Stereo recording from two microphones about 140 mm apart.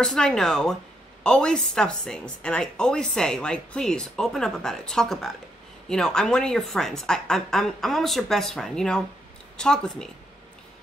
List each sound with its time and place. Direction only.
0.0 s speech: 5° left (ahead or behind)